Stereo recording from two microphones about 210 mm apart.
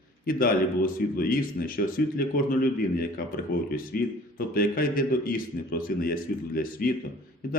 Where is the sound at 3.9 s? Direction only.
45° left (ahead or behind).